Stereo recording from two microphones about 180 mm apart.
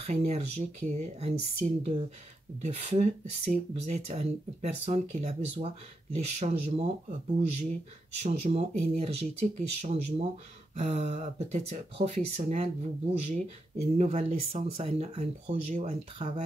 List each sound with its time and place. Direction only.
0.0 s speech: 35° right (ahead or behind)